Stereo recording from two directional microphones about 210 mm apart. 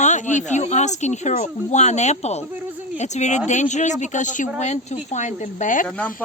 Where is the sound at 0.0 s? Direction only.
35° left (ahead or behind).